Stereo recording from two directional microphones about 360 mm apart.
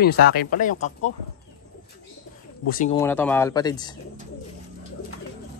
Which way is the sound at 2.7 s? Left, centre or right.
Left.